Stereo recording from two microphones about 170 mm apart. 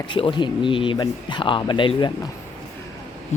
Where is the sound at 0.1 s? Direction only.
30° left (ahead or behind).